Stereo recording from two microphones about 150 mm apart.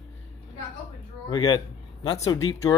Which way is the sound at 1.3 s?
25° left (ahead or behind).